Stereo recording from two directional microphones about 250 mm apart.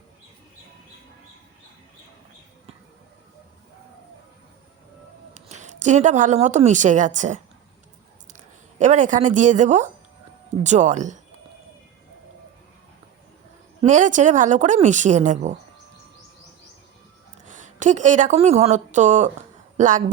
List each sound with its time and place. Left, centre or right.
5.3 s speech: right
8.8 s speech: right
13.8 s speech: right
17.4 s a woman's voice: right